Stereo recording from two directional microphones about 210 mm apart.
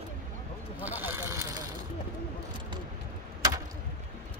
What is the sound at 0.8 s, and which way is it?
Speech, 10° right (ahead or behind).